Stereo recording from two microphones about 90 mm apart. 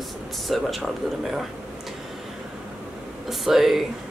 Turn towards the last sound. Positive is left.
turn(degrees=-5)  # may be behind; listen again after turning